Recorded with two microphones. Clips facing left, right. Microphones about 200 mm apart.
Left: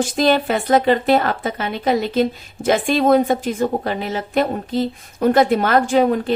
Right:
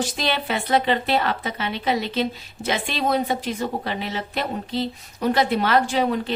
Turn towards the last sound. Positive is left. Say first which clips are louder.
# left 5 dB
turn(degrees=50)  # may be behind; listen again after turning